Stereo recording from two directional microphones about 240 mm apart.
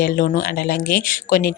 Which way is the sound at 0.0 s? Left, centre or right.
Left.